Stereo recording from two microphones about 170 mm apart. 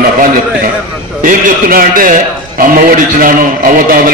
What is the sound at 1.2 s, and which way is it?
A man's voice, 55° right (ahead or behind).